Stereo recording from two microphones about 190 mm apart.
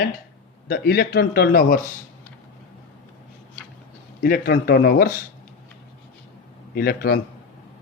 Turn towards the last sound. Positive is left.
turn(degrees=50)  # may be behind; listen again after turning